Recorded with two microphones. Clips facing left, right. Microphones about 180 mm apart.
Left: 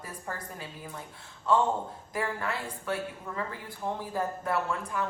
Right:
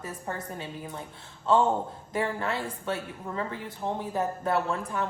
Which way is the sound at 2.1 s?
25° right (ahead or behind).